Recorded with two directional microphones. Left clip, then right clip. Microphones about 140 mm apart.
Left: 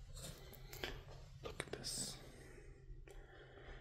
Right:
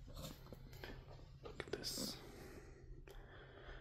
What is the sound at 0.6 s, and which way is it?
Music, 30° left (ahead or behind).